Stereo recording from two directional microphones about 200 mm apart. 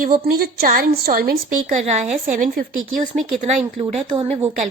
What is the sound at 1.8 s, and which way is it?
Speech, 35° right (ahead or behind).